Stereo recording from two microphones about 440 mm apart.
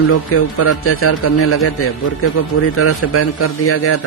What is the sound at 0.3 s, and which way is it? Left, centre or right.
A man's voice, left.